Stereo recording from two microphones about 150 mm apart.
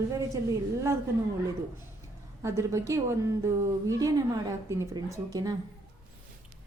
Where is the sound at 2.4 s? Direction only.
20° right (ahead or behind).